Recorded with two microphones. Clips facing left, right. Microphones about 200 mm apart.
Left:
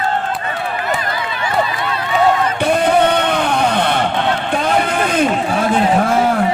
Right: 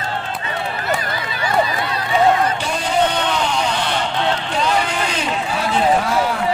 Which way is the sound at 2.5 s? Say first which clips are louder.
Left 6 dB; 60° left (ahead or behind).